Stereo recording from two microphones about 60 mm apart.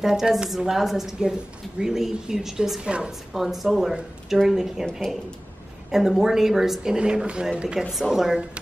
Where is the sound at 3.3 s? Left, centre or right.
Centre.